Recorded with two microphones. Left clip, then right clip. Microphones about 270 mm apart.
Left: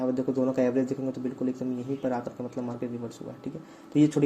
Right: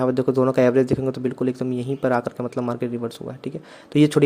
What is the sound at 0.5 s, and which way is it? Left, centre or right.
Speech, right.